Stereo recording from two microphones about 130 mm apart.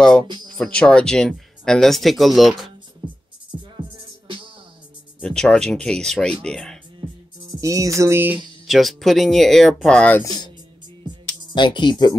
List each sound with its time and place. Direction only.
0.7 s speech: 5° left (ahead or behind)
3.7 s music: 40° right (ahead or behind)
5.2 s speech: 5° left (ahead or behind)
7.6 s music: 25° right (ahead or behind)
8.6 s speech: centre (ahead or behind)
10.2 s speech: 30° left (ahead or behind)
11.5 s speech: 35° left (ahead or behind)